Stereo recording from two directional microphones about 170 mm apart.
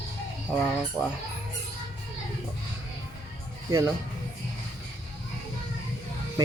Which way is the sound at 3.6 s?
20° right (ahead or behind).